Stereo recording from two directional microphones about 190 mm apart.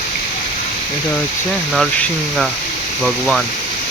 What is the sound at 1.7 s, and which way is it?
Speech, centre (ahead or behind).